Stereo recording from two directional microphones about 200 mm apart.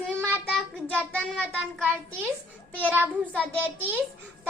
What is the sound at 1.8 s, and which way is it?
A child's voice, 5° right (ahead or behind).